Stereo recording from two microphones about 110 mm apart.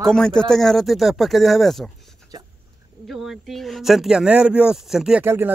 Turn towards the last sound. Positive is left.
turn(degrees=-20)  # may be behind; listen again after turning